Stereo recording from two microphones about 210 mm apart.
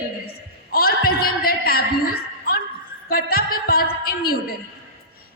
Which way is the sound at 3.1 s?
45° left (ahead or behind).